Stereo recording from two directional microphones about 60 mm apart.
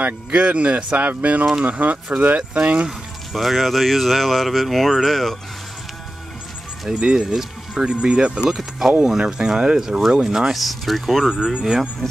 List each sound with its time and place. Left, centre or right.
0.0 s speech: centre
3.3 s speech: centre
6.9 s speech: centre
11.2 s speech: centre